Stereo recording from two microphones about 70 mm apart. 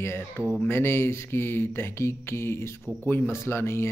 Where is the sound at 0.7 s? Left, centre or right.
Left.